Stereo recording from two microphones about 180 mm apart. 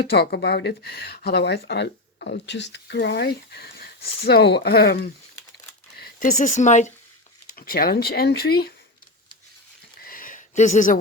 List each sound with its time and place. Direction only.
0.1 s speech: 65° left (ahead or behind); by 6.9 s 40° left (ahead or behind)
7.5 s speech: 55° left (ahead or behind)
10.0 s a sound: 50° left (ahead or behind)